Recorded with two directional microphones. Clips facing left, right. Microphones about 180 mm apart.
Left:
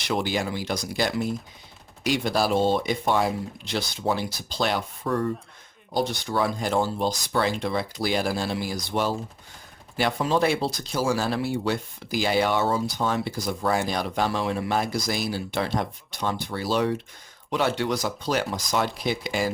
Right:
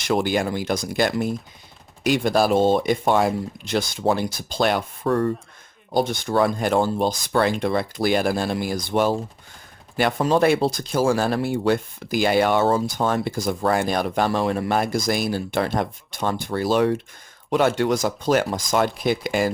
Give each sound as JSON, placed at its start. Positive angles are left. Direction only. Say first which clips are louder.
{"t": 0.0, "sound": "speech", "louder": "right 5 dB", "side_deg": -50}